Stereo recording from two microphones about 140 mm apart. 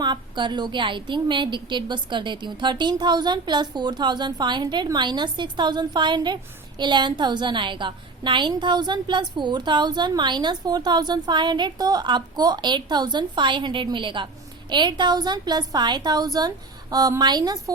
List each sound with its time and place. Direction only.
0.0 s a woman's voice: 35° right (ahead or behind)